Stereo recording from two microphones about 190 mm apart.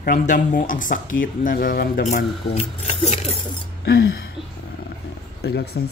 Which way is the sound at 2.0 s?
35° left (ahead or behind).